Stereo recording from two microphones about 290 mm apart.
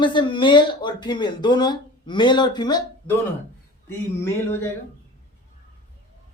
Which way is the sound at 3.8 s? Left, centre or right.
Centre.